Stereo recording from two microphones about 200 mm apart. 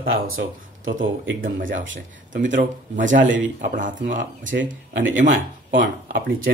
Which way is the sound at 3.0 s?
40° right (ahead or behind).